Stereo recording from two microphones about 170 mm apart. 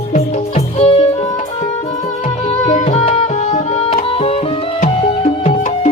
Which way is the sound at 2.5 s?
40° left (ahead or behind).